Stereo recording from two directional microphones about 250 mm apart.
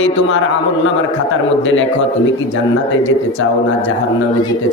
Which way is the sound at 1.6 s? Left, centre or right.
Left.